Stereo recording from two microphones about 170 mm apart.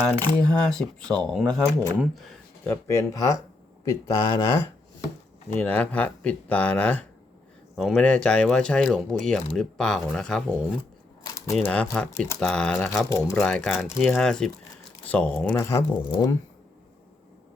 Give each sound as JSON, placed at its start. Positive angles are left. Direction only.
{"t": 0.4, "sound": "speech", "side_deg": 5}
{"t": 2.6, "sound": "speech", "side_deg": 15}
{"t": 11.3, "sound": "crumpling", "side_deg": 15}
{"t": 11.5, "sound": "speech", "side_deg": 5}
{"t": 13.0, "sound": "speech", "side_deg": 20}
{"t": 13.4, "sound": "speech", "side_deg": 0}
{"t": 15.6, "sound": "speech", "side_deg": 20}